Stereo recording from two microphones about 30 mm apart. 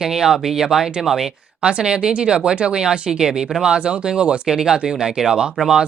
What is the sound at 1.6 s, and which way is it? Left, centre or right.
Speech, right.